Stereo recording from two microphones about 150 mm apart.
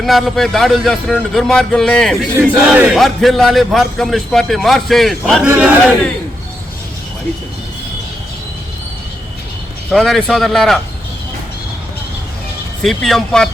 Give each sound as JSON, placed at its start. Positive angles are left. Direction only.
{"t": 0.0, "sound": "a man's voice", "side_deg": 0}
{"t": 9.9, "sound": "a man's voice", "side_deg": 5}
{"t": 12.8, "sound": "a man's voice", "side_deg": 0}